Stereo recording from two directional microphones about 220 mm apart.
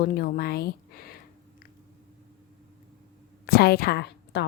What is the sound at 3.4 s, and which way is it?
A woman's voice, 45° left (ahead or behind).